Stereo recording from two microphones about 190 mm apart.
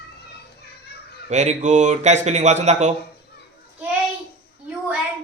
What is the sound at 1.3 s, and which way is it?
A man's voice, 35° right (ahead or behind).